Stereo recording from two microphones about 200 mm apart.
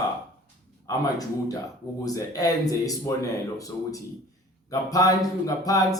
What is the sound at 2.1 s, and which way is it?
Speech, 15° left (ahead or behind).